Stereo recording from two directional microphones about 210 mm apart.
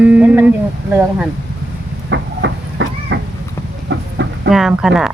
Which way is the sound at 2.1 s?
55° right (ahead or behind).